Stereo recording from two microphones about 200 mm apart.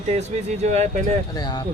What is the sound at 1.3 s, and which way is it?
Speech, 20° left (ahead or behind).